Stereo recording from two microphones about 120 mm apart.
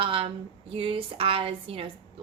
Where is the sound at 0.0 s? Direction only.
50° right (ahead or behind).